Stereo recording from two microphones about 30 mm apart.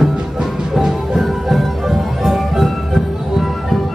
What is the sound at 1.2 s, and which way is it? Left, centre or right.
Music, centre.